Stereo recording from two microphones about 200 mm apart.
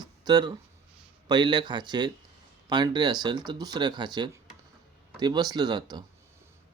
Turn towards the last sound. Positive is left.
turn(degrees=-20)  # may be behind; listen again after turning